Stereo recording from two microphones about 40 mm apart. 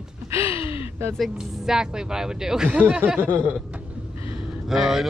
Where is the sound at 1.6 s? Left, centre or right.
Centre.